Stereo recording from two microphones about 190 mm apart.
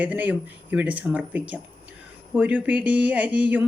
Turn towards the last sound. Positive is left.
turn(degrees=-5)  # may be behind; listen again after turning